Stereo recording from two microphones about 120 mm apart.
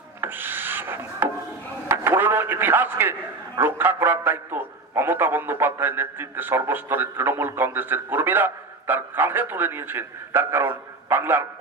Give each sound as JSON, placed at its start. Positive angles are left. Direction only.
{"t": 0.2, "sound": "rub", "side_deg": -15}
{"t": 1.9, "sound": "a man's voice", "side_deg": -15}